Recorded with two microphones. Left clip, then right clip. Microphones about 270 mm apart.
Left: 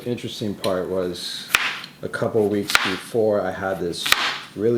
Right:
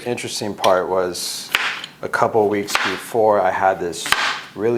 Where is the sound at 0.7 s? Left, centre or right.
Right.